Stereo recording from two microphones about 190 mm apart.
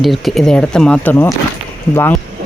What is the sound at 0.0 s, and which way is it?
Speech, centre (ahead or behind).